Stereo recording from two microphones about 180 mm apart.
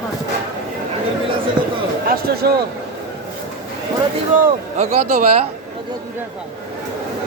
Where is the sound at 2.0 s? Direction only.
60° right (ahead or behind).